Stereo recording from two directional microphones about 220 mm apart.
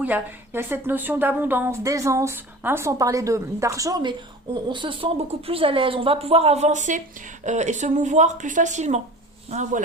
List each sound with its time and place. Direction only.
0.0 s a woman's voice: 10° right (ahead or behind); by 9.8 s 30° right (ahead or behind)